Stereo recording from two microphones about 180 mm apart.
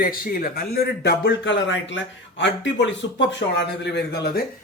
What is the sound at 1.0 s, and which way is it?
Speech, 85° left.